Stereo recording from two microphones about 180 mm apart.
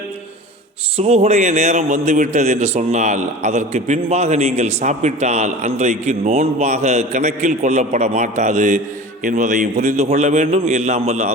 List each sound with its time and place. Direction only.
0.9 s a man's voice: 35° right (ahead or behind)